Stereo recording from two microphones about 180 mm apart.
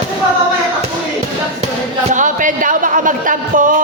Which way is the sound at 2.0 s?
45° right (ahead or behind).